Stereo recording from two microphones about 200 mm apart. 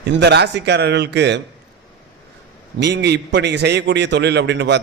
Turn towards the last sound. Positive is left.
turn(degrees=-60)  # may be behind; listen again after turning